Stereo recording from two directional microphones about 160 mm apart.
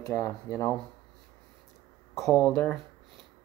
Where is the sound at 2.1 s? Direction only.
5° left (ahead or behind).